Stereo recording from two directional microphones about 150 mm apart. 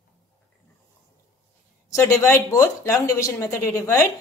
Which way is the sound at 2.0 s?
15° left (ahead or behind).